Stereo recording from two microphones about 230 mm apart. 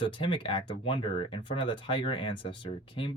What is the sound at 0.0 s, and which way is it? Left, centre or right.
Speech, left.